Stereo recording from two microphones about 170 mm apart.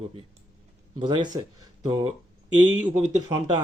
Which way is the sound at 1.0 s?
25° right (ahead or behind).